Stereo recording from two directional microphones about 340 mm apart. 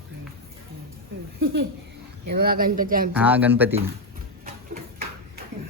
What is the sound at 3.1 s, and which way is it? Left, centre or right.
Speech, centre.